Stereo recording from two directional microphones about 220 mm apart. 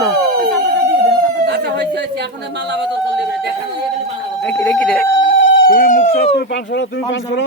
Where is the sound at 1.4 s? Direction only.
50° right (ahead or behind).